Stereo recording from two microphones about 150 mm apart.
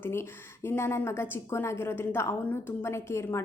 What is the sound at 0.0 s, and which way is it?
A woman's voice, 15° left (ahead or behind).